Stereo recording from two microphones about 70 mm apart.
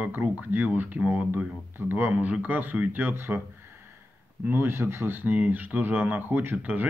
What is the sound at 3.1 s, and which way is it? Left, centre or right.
Speech, right.